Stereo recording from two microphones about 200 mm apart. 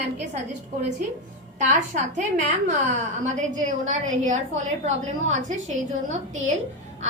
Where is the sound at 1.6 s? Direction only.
40° right (ahead or behind).